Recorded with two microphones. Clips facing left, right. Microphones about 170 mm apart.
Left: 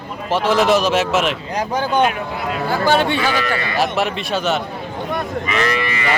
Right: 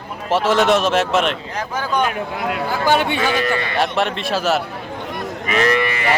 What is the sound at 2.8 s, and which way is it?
Speech, 15° right (ahead or behind).